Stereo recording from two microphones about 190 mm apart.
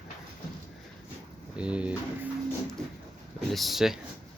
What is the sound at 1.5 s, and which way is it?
Speech, 5° right (ahead or behind).